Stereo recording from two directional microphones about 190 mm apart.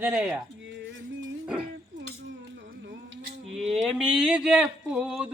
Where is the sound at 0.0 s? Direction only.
10° right (ahead or behind).